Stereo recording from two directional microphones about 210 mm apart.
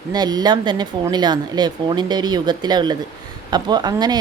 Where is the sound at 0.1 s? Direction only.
20° right (ahead or behind).